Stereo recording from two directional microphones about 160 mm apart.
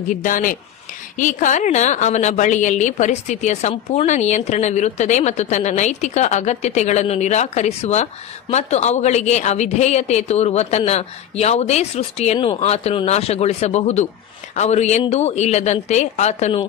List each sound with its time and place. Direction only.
0.1 s a woman's voice: 55° left (ahead or behind)